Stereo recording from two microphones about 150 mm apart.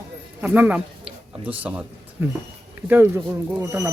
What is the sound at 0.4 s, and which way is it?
Speech, 10° right (ahead or behind).